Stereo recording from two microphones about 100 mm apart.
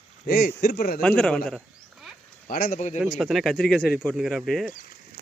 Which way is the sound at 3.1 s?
Centre (ahead or behind).